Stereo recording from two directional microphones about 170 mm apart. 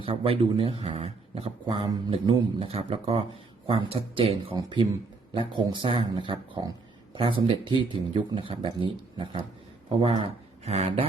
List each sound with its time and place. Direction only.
0.0 s speech: 30° right (ahead or behind)